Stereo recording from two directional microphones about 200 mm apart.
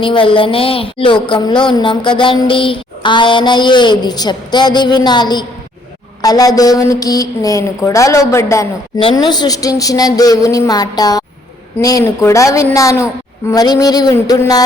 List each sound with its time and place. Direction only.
0.0 s a woman's voice: 25° left (ahead or behind)
9.0 s a woman's voice: 25° left (ahead or behind)